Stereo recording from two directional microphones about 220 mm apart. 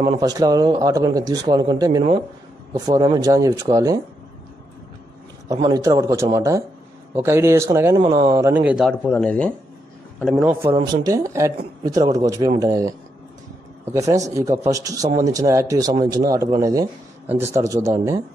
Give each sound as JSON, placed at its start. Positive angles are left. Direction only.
{"t": 0.0, "sound": "speech", "side_deg": -15}
{"t": 5.5, "sound": "speech", "side_deg": -15}
{"t": 9.0, "sound": "speech", "side_deg": 5}
{"t": 10.3, "sound": "speech", "side_deg": -10}